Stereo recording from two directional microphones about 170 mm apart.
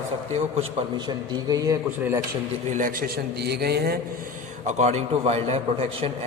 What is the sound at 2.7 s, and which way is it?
A man's voice, 55° right (ahead or behind).